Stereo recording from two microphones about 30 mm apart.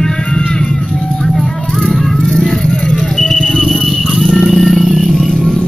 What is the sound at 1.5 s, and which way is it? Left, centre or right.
Music, centre.